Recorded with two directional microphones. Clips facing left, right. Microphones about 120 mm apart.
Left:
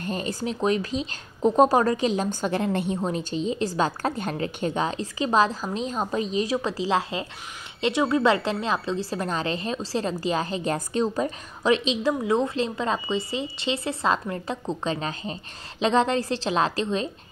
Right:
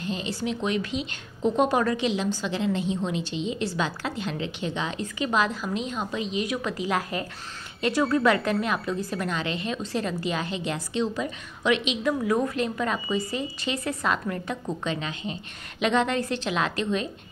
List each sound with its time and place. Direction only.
0.0 s speech: 45° left (ahead or behind); by 17.1 s 30° left (ahead or behind)